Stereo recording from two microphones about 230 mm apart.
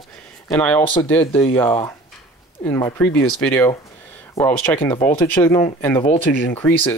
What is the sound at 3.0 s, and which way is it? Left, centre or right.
Speech, left.